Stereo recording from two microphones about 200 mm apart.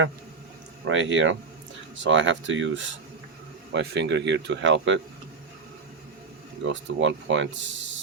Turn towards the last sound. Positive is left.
turn(degrees=-70)  # may be behind; listen again after turning